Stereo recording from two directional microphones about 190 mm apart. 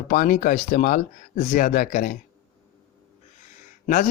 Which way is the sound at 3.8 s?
45° left (ahead or behind).